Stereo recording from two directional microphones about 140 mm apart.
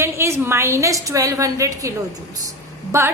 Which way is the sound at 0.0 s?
20° right (ahead or behind).